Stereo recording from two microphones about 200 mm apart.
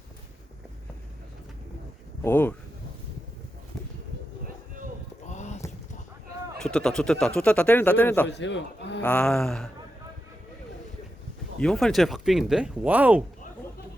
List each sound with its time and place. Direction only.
2.2 s speech: 10° left (ahead or behind)
5.2 s a sound: 35° left (ahead or behind)
6.6 s a man's voice: 5° left (ahead or behind)
8.3 s a man's voice: 60° left (ahead or behind)
9.0 s a man's voice: 5° left (ahead or behind)
11.6 s a man's voice: centre (ahead or behind)